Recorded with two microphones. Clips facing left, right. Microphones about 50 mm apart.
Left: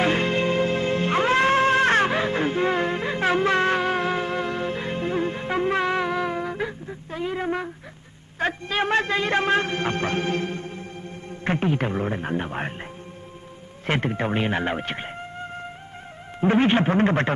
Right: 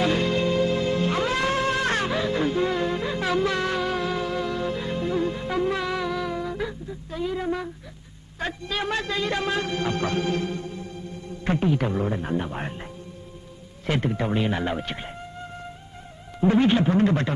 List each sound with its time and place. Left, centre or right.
0.0 s music: left
8.4 s a man's voice: left